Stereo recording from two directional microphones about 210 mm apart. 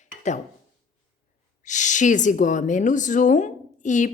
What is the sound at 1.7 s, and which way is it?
A woman's voice, 35° left (ahead or behind).